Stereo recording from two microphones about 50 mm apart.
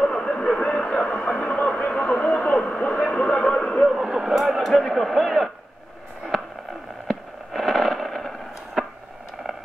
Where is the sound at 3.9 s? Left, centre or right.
Centre.